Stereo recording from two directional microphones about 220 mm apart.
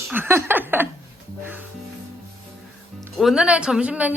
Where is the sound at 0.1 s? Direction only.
10° right (ahead or behind).